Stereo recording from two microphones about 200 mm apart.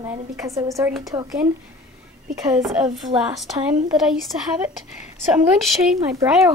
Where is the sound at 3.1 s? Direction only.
25° right (ahead or behind).